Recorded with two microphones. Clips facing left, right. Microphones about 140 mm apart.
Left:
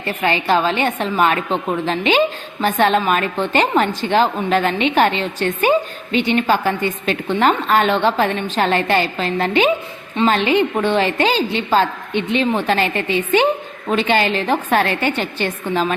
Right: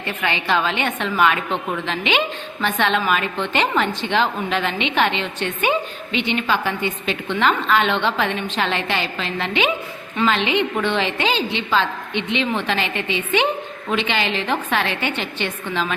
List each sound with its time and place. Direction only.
0.0 s a woman's voice: 35° left (ahead or behind)